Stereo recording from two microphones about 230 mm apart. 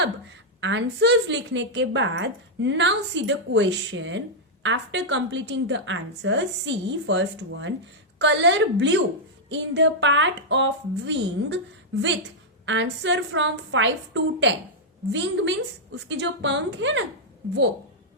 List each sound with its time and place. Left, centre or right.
0.6 s a woman's voice: right
12.6 s a woman's voice: right